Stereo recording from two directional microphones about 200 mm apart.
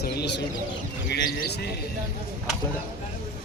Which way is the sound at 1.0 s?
55° left (ahead or behind).